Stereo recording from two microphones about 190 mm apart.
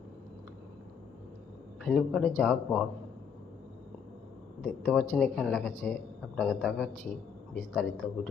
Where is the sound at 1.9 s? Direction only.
5° left (ahead or behind).